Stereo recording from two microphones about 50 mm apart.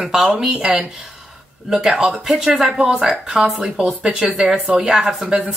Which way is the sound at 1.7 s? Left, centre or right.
Centre.